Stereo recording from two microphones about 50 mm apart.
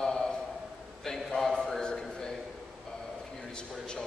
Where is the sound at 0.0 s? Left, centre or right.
Centre.